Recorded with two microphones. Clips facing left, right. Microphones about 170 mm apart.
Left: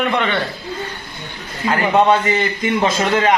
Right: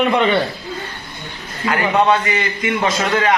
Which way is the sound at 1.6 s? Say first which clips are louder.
Left 1 dB; 35° left (ahead or behind).